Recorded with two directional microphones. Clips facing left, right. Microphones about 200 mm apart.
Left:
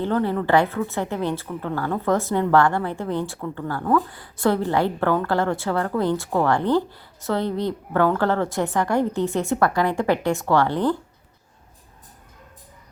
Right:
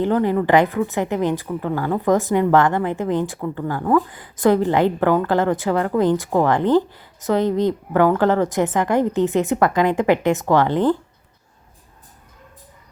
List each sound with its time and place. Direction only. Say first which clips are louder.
0.0 s a woman's voice: right 4 dB; 15° right (ahead or behind)